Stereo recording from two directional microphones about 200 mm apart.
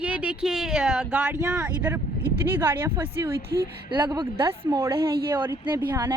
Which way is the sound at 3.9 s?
25° right (ahead or behind).